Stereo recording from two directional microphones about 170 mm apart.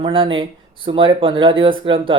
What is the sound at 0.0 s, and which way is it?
Speech, 30° right (ahead or behind).